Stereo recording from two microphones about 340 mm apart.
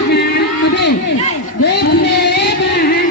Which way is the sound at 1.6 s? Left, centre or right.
Left.